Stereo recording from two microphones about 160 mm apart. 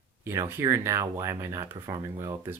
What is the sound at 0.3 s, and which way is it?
Speech, 15° right (ahead or behind).